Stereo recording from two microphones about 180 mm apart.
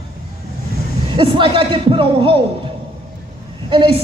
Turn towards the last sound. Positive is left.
turn(degrees=-25)  # may be behind; listen again after turning